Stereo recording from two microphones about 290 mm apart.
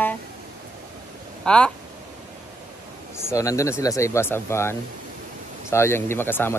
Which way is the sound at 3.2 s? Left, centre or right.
Centre.